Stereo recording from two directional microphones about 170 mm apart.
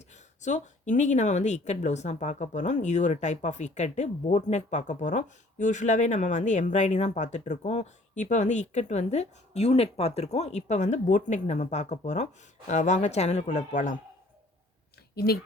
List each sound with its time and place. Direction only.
0.1 s speech: 45° left (ahead or behind)
15.1 s speech: 65° left (ahead or behind)